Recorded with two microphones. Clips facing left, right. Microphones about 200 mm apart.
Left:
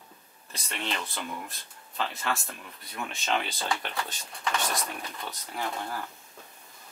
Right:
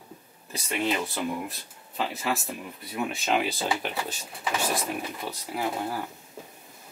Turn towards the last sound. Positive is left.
turn(degrees=-10)  # may be behind; listen again after turning